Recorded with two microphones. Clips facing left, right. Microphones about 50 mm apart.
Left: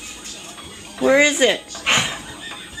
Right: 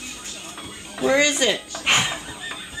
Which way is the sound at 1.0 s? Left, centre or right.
Centre.